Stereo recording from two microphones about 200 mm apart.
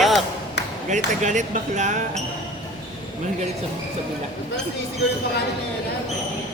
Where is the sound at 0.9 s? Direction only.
40° right (ahead or behind).